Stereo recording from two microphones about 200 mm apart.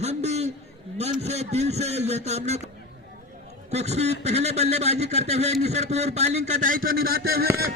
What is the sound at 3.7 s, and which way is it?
A man's voice, 35° right (ahead or behind).